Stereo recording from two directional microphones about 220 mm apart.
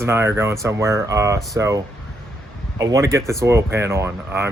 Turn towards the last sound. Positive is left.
turn(degrees=-10)  # may be behind; listen again after turning